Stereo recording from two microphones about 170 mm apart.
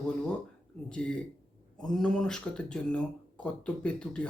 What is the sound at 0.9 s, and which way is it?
Speech, 5° left (ahead or behind).